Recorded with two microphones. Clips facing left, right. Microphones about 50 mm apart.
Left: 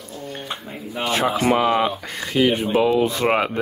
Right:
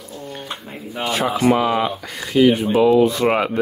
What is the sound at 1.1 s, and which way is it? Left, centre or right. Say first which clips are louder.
Speech: right 2 dB; left.